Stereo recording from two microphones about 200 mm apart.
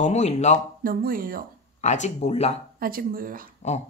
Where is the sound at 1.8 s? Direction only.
35° left (ahead or behind).